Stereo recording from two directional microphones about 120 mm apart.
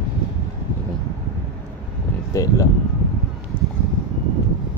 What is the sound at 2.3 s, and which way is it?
Speech, 25° left (ahead or behind).